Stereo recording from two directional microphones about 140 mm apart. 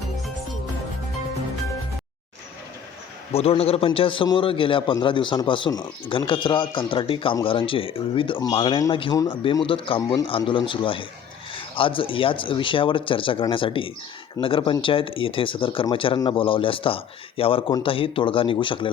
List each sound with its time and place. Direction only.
3.3 s a man's voice: 45° left (ahead or behind)